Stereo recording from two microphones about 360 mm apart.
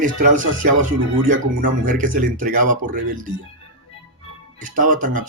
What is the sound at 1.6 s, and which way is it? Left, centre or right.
Speech, right.